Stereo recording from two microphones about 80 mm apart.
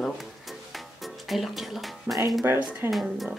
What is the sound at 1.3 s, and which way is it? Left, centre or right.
Speech, centre.